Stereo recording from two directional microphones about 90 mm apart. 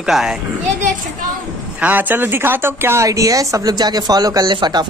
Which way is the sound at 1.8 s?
20° right (ahead or behind).